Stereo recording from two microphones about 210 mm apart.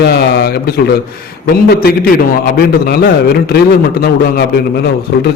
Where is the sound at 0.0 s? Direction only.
50° left (ahead or behind).